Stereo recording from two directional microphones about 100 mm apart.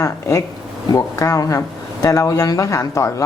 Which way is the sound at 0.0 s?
30° left (ahead or behind).